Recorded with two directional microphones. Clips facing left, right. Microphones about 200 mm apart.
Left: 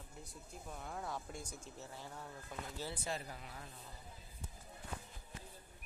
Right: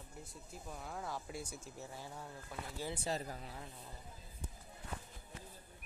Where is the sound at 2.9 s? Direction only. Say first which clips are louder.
Right 3 dB; 35° right (ahead or behind).